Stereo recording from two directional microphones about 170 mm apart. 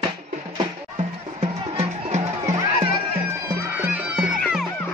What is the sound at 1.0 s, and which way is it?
Music, 40° right (ahead or behind).